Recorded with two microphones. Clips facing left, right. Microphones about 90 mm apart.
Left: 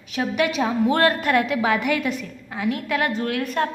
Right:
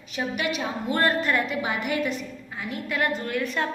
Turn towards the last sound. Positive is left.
turn(degrees=50)  # may be behind; listen again after turning